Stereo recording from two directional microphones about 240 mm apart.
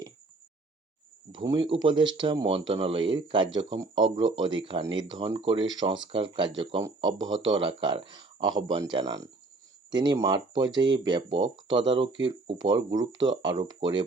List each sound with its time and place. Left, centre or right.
1.3 s speech: centre